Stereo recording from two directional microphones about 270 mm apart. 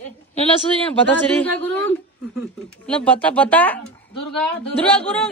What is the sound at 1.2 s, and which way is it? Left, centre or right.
A woman's voice, centre.